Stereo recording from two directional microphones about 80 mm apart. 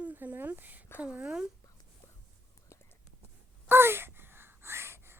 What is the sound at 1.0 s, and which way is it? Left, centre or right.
Speech, centre.